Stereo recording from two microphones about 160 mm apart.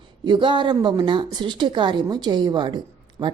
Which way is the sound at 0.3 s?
30° right (ahead or behind).